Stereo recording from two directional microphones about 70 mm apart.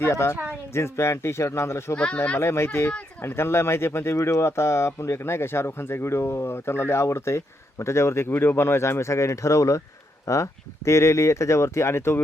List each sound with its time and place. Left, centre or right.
0.0 s speech: left
2.1 s a child's voice: left
2.4 s speech: left